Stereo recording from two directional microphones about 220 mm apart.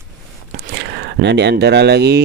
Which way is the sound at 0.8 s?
50° right (ahead or behind).